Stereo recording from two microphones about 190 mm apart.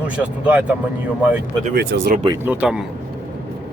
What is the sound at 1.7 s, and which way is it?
Speech, 60° right (ahead or behind).